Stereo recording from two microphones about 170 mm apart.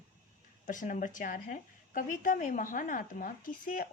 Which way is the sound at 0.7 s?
50° left (ahead or behind).